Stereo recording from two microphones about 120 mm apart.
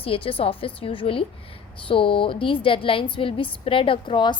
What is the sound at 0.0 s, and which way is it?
A woman's voice, 50° left (ahead or behind).